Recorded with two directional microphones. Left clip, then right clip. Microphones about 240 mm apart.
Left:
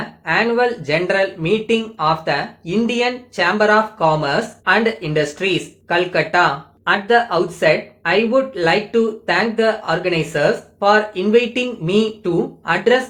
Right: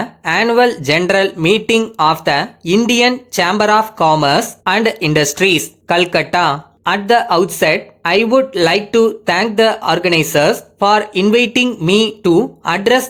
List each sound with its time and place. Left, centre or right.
0.3 s speech: right